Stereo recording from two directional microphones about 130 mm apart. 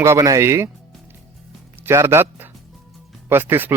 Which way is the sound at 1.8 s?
20° right (ahead or behind).